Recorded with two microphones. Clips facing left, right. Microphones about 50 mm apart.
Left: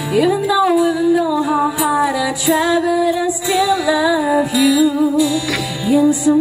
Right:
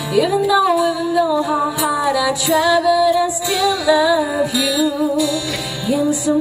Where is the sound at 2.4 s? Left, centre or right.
Left.